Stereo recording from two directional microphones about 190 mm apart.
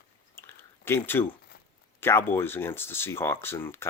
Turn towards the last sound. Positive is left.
turn(degrees=10)  # may be behind; listen again after turning